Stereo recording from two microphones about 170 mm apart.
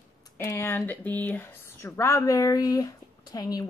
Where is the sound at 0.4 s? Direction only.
15° left (ahead or behind).